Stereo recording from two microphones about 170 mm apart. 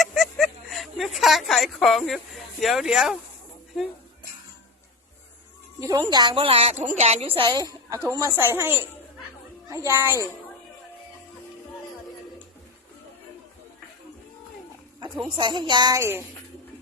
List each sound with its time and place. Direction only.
0.0 s a sound: centre (ahead or behind)
5.8 s a woman's voice: 25° right (ahead or behind)
15.4 s a woman's voice: 30° right (ahead or behind)